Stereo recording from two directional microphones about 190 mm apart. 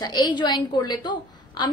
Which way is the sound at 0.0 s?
20° left (ahead or behind).